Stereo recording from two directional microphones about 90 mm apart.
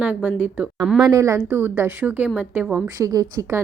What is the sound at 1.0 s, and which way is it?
A woman's voice, 35° right (ahead or behind).